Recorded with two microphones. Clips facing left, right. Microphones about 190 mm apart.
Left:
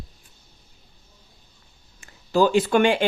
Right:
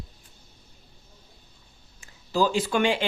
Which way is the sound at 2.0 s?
60° left (ahead or behind).